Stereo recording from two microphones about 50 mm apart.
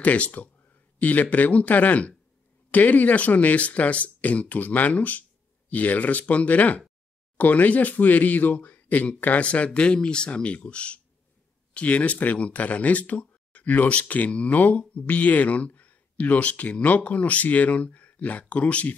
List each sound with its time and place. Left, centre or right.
0.0 s speech: left
9.9 s speech: centre